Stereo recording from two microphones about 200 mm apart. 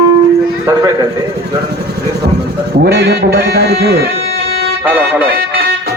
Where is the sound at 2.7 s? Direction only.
55° right (ahead or behind).